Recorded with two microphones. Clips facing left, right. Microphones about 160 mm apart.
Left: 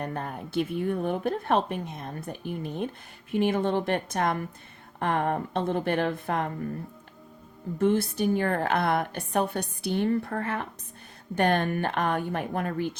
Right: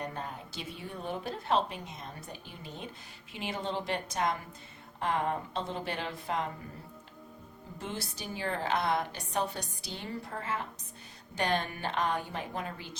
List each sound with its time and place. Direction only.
0.0 s a woman's voice: 55° left (ahead or behind)
7.8 s a woman's voice: 55° left (ahead or behind)